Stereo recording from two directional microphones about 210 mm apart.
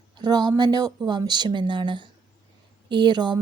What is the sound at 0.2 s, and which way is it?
Speech, 20° right (ahead or behind).